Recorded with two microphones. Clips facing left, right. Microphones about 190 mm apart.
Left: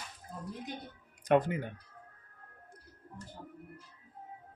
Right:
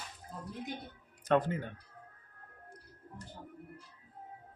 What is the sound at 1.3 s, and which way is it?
Speech, 15° left (ahead or behind).